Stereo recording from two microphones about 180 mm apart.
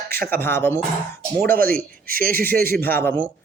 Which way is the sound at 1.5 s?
55° right (ahead or behind).